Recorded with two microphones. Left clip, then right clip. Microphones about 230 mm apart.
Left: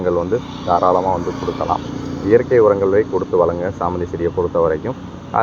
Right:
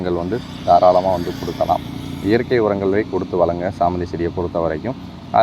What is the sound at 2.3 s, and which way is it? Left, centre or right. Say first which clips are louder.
Speech: left 5 dB; right.